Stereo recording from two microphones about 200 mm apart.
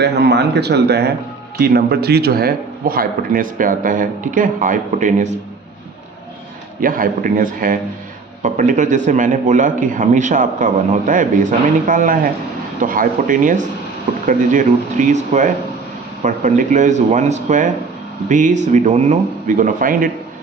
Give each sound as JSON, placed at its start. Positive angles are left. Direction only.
{"t": 0.0, "sound": "a man's voice", "side_deg": -55}
{"t": 6.7, "sound": "a man's voice", "side_deg": -45}